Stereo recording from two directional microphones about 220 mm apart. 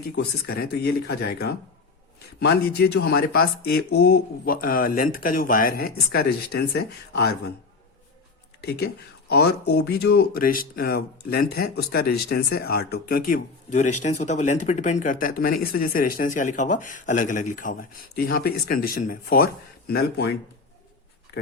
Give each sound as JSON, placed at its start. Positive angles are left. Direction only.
{"t": 0.2, "sound": "speech", "side_deg": 45}
{"t": 9.3, "sound": "speech", "side_deg": 45}